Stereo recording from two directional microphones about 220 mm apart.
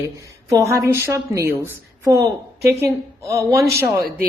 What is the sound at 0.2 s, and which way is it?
A woman's voice, 15° right (ahead or behind).